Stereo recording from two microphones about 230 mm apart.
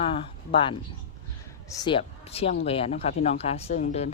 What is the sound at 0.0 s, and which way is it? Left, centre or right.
A woman's voice, left.